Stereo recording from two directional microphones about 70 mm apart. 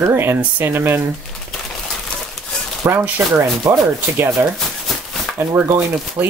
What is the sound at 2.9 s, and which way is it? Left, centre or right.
Speech, right.